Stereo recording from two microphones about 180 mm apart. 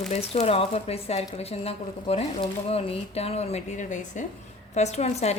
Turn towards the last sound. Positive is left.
turn(degrees=35)  # may be behind; listen again after turning